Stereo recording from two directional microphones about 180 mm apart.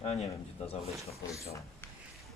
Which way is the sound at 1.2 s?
15° left (ahead or behind).